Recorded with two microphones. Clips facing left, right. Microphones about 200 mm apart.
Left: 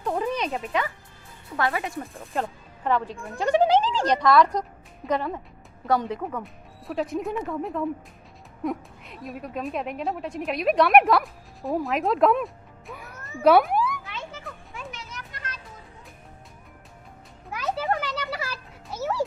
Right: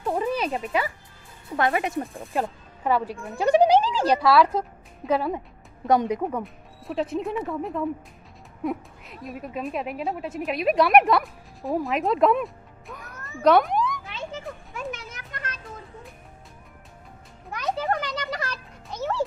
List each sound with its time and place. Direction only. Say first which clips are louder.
0.0 s music: right 1 dB; 5° right (ahead or behind)
1.5 s speech: right 3 dB; 25° right (ahead or behind)
2.4 s speech: right 2 dB; 10° right (ahead or behind)
6.4 s a woman's voice: right 2 dB; centre (ahead or behind)
14.7 s children playing: right 5 dB; 50° right (ahead or behind)
17.5 s a sound: even; 5° left (ahead or behind)